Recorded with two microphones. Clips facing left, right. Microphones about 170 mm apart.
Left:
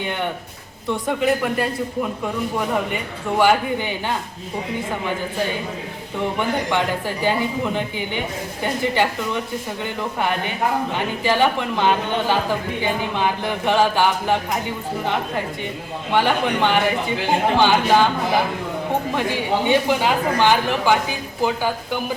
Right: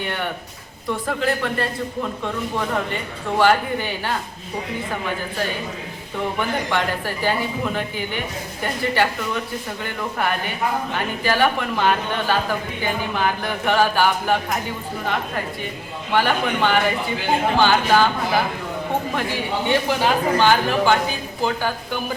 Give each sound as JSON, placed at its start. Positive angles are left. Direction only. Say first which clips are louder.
{"t": 0.0, "sound": "a woman's voice", "louder": "left 2 dB", "side_deg": 15}
{"t": 1.0, "sound": "a woman's voice", "louder": "left 3 dB", "side_deg": 5}
{"t": 6.3, "sound": "a woman's voice", "louder": "left 2 dB", "side_deg": 15}
{"t": 19.6, "sound": "a woman's voice", "louder": "left 1 dB", "side_deg": 15}